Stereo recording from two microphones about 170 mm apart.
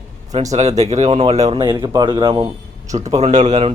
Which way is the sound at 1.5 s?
20° right (ahead or behind).